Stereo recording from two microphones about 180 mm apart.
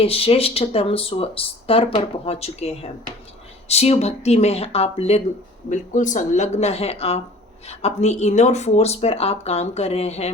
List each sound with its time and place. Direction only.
0.0 s speech: 30° left (ahead or behind)